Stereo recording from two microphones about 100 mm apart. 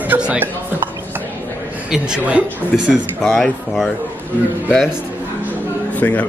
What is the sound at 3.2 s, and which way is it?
Speech, 5° left (ahead or behind).